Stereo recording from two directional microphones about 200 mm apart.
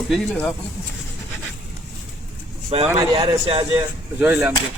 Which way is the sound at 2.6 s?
25° right (ahead or behind).